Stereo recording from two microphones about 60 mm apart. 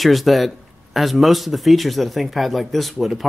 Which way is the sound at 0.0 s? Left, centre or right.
Centre.